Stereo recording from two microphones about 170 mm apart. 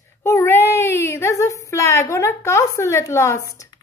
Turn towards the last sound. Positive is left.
turn(degrees=20)  # may be behind; listen again after turning